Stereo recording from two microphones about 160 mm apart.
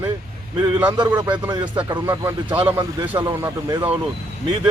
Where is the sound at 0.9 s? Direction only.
25° right (ahead or behind).